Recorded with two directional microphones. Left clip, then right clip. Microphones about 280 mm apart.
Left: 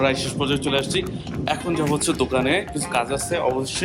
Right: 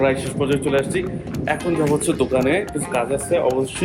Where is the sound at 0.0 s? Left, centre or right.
Centre.